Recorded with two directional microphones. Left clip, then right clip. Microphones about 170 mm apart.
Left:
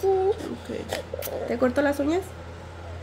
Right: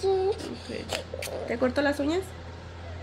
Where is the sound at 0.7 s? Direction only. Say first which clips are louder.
Left 2 dB; 30° left (ahead or behind); by 2.2 s 15° left (ahead or behind).